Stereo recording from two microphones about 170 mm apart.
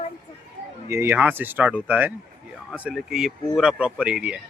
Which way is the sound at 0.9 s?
15° right (ahead or behind).